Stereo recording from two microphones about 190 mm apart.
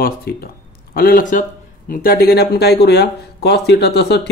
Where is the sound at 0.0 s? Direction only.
50° left (ahead or behind).